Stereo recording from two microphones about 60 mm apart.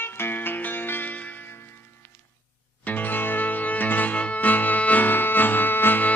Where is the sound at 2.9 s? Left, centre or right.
Left.